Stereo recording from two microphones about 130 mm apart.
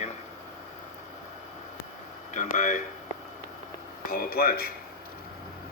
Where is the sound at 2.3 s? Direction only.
75° left (ahead or behind).